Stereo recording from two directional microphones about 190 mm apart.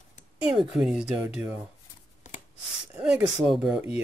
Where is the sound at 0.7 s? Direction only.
5° right (ahead or behind).